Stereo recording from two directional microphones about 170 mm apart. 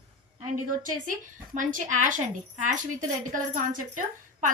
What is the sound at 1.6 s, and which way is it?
A woman's voice, 50° right (ahead or behind).